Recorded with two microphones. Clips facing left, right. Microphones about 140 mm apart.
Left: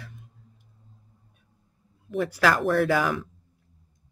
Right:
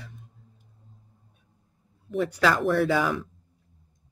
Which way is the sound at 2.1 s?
5° left (ahead or behind).